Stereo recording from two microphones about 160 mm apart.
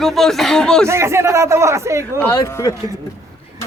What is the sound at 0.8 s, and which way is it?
A man's voice, 15° right (ahead or behind).